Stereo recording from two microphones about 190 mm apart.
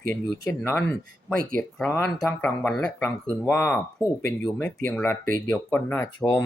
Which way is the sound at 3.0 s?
15° left (ahead or behind).